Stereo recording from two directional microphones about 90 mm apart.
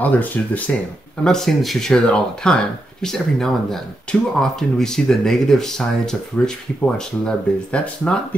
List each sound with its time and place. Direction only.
0.0 s speech: 20° left (ahead or behind)
1.2 s speech: 5° left (ahead or behind)